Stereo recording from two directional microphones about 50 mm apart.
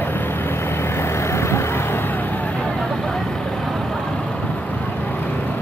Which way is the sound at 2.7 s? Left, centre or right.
Centre.